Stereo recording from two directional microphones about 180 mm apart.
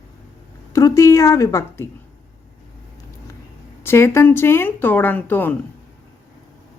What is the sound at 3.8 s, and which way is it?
Speech, 15° left (ahead or behind).